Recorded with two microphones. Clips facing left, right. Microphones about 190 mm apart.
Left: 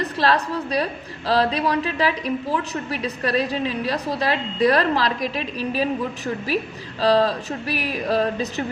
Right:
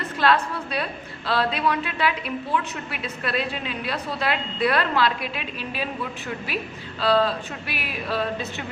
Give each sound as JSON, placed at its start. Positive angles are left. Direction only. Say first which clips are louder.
{"t": 0.2, "sound": "a woman's voice", "louder": "even", "side_deg": 35}